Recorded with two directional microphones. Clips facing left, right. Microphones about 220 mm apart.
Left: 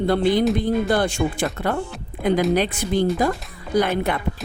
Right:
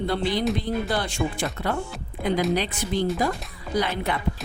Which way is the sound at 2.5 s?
50° left (ahead or behind).